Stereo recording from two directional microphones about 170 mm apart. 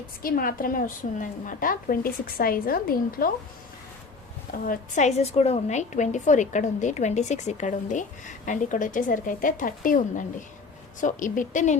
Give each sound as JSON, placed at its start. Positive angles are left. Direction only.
{"t": 0.2, "sound": "a woman's voice", "side_deg": 60}
{"t": 4.6, "sound": "a woman's voice", "side_deg": 50}